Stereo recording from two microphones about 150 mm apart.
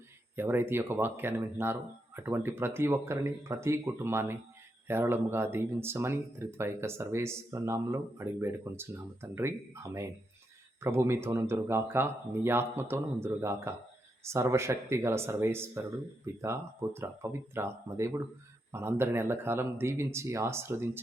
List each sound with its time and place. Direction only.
0.3 s speech: 15° right (ahead or behind)